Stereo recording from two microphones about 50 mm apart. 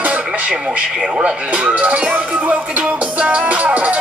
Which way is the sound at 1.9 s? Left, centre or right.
Right.